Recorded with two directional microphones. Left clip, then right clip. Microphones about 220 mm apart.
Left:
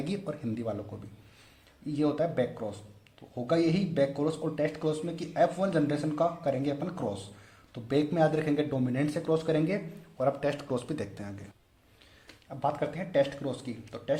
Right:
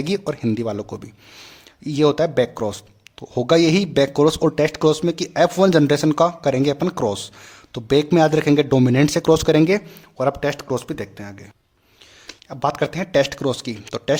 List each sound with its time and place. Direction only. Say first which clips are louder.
0.0 s speech: right 13 dB; 30° right (ahead or behind)
12.3 s speech: right 9 dB; 35° right (ahead or behind)